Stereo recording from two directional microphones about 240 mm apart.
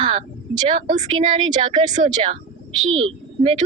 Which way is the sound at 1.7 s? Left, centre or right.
Centre.